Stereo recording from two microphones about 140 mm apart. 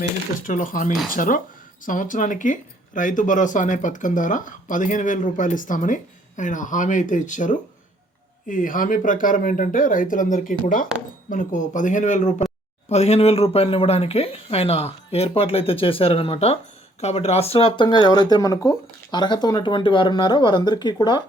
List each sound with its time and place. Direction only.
0.4 s speech: 75° left (ahead or behind)
11.3 s speech: 65° left (ahead or behind)
12.9 s speech: 50° left (ahead or behind); by 21.2 s 30° left (ahead or behind)